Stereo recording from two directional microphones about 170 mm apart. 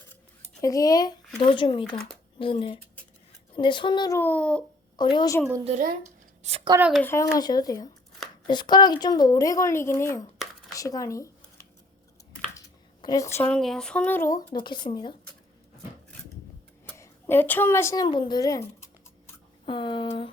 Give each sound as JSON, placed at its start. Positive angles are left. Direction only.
{"t": 0.6, "sound": "speech", "side_deg": 20}
{"t": 4.2, "sound": "speech", "side_deg": 10}
{"t": 4.9, "sound": "speech", "side_deg": 25}
{"t": 5.6, "sound": "speech", "side_deg": -45}
{"t": 6.7, "sound": "speech", "side_deg": -5}
{"t": 7.0, "sound": "speech", "side_deg": 15}
{"t": 12.5, "sound": "a sound", "side_deg": 20}
{"t": 13.5, "sound": "speech", "side_deg": 5}
{"t": 16.8, "sound": "a woman's voice", "side_deg": 15}